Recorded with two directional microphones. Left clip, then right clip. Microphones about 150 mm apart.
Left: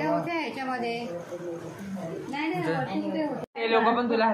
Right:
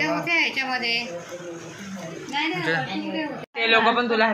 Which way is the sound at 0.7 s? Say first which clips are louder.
Right 6 dB; 60° left (ahead or behind).